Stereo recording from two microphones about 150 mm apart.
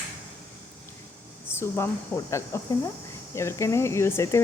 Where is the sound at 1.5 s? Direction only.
15° left (ahead or behind).